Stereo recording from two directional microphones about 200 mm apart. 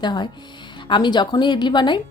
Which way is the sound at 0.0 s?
20° left (ahead or behind).